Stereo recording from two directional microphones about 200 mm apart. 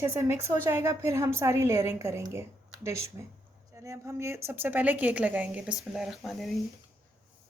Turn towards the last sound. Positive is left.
turn(degrees=0)  # may be behind; listen again after turning